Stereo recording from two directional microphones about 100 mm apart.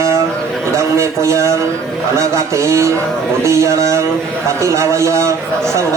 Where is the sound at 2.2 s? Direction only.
30° right (ahead or behind).